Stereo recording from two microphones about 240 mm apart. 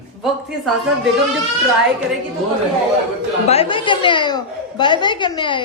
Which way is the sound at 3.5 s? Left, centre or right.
Left.